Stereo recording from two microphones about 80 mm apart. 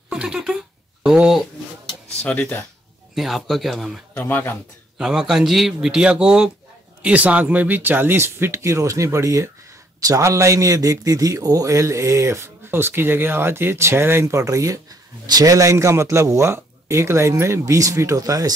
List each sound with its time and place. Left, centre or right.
0.1 s a man's voice: centre
2.2 s speech: centre
3.2 s speech: centre
4.1 s a man's voice: left
4.9 s a man's voice: centre; by 18.5 s right